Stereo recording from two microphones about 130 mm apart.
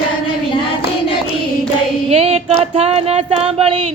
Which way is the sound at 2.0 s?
50° right (ahead or behind).